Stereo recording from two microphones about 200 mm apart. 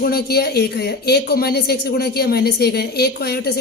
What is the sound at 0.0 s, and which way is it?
Speech, 50° left (ahead or behind).